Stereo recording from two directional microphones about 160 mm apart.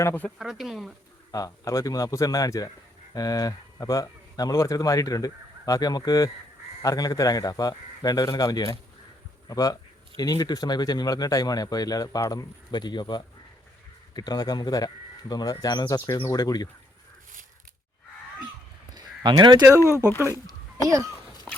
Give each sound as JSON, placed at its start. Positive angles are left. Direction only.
{"t": 0.0, "sound": "speech", "side_deg": 15}
{"t": 0.3, "sound": "speech", "side_deg": 0}
{"t": 1.3, "sound": "speech", "side_deg": 20}
{"t": 18.9, "sound": "a sound", "side_deg": -25}
{"t": 20.1, "sound": "speech", "side_deg": 15}
{"t": 20.8, "sound": "speech", "side_deg": -20}